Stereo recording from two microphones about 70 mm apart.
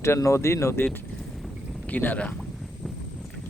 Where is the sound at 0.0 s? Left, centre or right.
Left.